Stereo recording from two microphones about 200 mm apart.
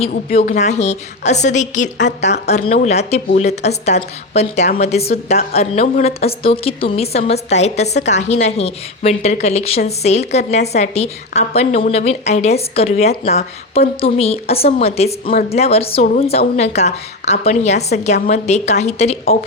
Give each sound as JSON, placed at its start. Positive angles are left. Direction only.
{"t": 0.3, "sound": "a woman's voice", "side_deg": 35}